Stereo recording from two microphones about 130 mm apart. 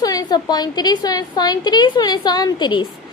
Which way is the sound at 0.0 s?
30° left (ahead or behind).